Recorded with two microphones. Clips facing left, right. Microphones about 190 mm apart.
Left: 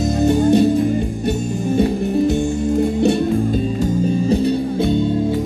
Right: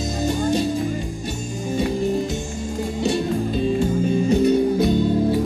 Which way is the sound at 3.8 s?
35° left (ahead or behind).